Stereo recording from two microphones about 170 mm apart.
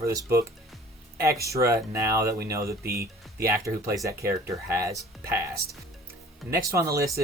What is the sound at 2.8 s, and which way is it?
Speech, 65° right (ahead or behind).